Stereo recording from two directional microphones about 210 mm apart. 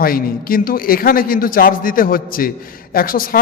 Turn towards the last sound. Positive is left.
turn(degrees=45)  # may be behind; listen again after turning